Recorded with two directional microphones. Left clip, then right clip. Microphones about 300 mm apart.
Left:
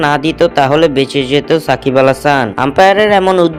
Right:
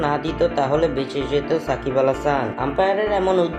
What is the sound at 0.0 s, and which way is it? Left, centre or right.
A man's voice, left.